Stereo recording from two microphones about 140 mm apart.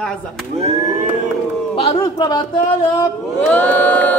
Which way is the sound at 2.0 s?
30° left (ahead or behind).